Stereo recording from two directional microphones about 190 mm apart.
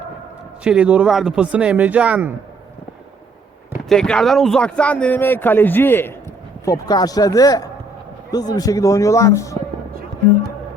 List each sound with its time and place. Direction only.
0.6 s speech: 5° right (ahead or behind)
3.8 s a man's voice: 5° left (ahead or behind)